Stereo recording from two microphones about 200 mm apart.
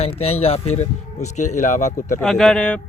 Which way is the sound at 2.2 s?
Centre (ahead or behind).